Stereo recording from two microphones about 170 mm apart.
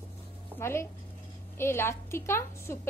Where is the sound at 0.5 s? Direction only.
15° left (ahead or behind).